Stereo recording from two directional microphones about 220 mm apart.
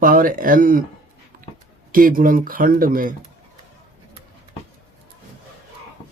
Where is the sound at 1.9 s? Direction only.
40° right (ahead or behind).